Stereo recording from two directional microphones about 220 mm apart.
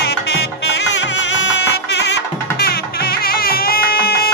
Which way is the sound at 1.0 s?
55° left (ahead or behind).